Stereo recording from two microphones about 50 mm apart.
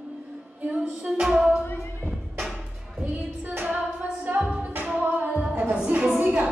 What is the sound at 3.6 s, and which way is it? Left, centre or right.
Music, right.